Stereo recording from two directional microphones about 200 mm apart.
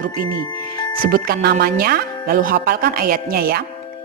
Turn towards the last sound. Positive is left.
turn(degrees=-50)  # may be behind; listen again after turning